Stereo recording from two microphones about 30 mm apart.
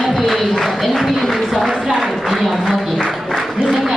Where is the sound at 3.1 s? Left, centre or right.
Centre.